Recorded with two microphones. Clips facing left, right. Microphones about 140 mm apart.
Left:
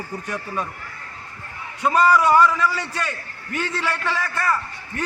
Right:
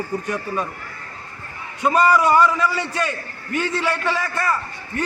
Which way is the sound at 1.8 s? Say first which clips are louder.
Right 1 dB; 10° right (ahead or behind).